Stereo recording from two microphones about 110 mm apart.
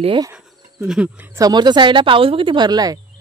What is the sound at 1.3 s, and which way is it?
Speech, 35° right (ahead or behind).